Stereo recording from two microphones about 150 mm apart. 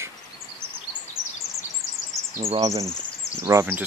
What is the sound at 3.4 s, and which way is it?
Speech, 15° right (ahead or behind).